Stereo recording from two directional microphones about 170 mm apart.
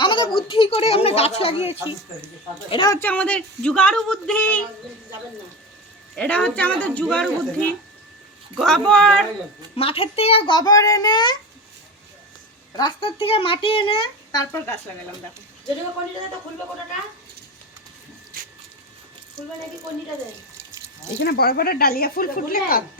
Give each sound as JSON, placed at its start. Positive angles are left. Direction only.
{"t": 0.0, "sound": "a sound", "side_deg": 30}
{"t": 0.4, "sound": "speech", "side_deg": 30}
{"t": 2.9, "sound": "speech", "side_deg": 10}
{"t": 6.1, "sound": "speech", "side_deg": 10}
{"t": 9.7, "sound": "a child's voice", "side_deg": 35}
{"t": 12.7, "sound": "speech", "side_deg": 30}
{"t": 21.2, "sound": "speech", "side_deg": 70}